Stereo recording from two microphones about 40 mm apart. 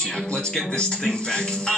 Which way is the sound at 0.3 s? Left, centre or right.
Left.